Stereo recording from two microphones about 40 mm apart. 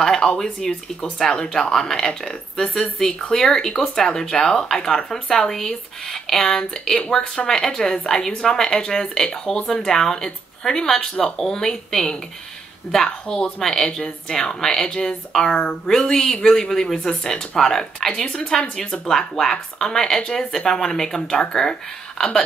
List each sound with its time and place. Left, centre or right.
0.0 s speech: centre
3.1 s speech: left
3.3 s speech: centre